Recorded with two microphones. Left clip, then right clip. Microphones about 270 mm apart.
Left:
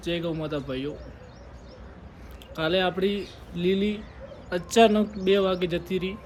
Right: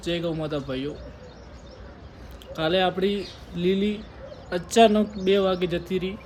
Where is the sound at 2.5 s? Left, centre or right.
Centre.